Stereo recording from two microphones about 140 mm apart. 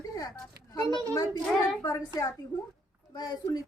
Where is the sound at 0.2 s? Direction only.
25° left (ahead or behind).